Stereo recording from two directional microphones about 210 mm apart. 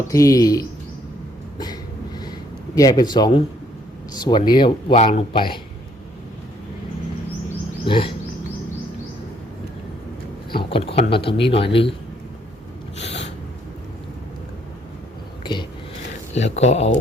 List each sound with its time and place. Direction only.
0.1 s speech: 15° left (ahead or behind)
1.5 s a sound: 20° left (ahead or behind)
2.7 s speech: 20° left (ahead or behind)
7.9 s speech: 25° left (ahead or behind)
10.5 s speech: 25° left (ahead or behind)
16.3 s speech: 30° left (ahead or behind)